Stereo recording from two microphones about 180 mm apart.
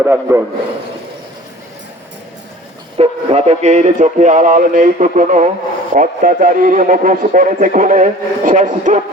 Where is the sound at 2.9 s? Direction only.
35° right (ahead or behind).